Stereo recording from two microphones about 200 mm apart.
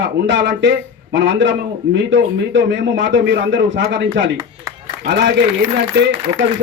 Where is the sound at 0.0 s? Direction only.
65° right (ahead or behind).